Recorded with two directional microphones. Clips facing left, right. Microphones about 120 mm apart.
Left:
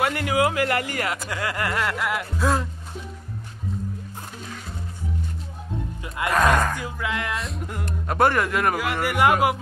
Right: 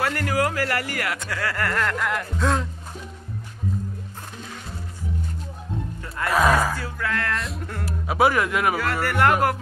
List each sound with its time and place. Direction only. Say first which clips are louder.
0.0 s speech: left 2 dB; 20° left (ahead or behind); by 2.7 s 5° left (ahead or behind)
6.0 s speech: left 1 dB; 15° left (ahead or behind)
6.3 s a man's voice: right 1 dB; 5° right (ahead or behind)
6.8 s speech: right 1 dB; 15° left (ahead or behind)
7.3 s a man's voice: even; centre (ahead or behind)
9.0 s speech: left 1 dB; 10° left (ahead or behind)